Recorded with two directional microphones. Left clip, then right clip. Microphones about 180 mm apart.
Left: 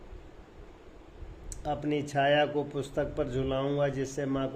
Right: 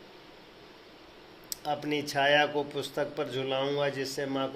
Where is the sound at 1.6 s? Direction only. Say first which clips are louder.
Even; 45° left (ahead or behind).